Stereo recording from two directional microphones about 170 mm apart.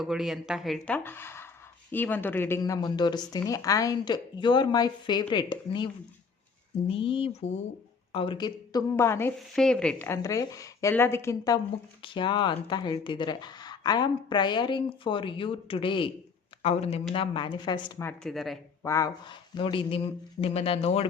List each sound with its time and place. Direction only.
0.0 s a woman's voice: centre (ahead or behind); by 9.3 s 15° left (ahead or behind)
9.5 s a woman's voice: 5° left (ahead or behind); by 17.9 s 25° left (ahead or behind)
18.0 s speech: 5° left (ahead or behind)
18.8 s speech: 15° left (ahead or behind); by 21.1 s 35° left (ahead or behind)